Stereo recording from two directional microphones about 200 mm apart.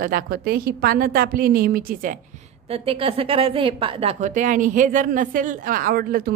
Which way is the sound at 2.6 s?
30° right (ahead or behind).